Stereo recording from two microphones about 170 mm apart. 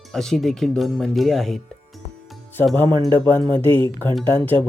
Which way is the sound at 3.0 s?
15° left (ahead or behind).